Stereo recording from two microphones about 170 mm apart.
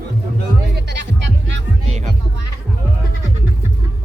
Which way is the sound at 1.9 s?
45° right (ahead or behind).